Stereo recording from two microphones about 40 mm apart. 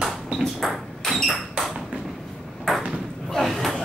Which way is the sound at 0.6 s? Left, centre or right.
Centre.